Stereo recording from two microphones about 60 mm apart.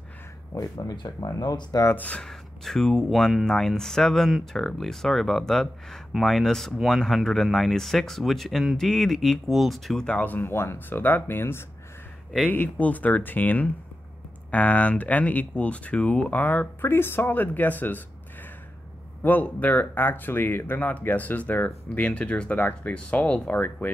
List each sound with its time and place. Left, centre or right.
0.6 s speech: left
2.0 s speech: left
2.2 s speech: centre
10.1 s speech: left
10.5 s speech: left
10.9 s speech: left
16.3 s speech: left
19.2 s speech: left